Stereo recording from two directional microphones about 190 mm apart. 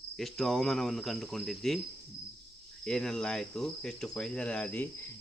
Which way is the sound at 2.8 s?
5° left (ahead or behind).